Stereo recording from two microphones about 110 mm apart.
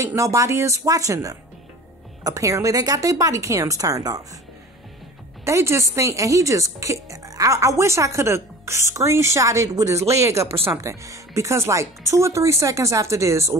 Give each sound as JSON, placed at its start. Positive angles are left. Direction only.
{"t": 0.0, "sound": "a woman's voice", "side_deg": -30}
{"t": 5.4, "sound": "speech", "side_deg": -25}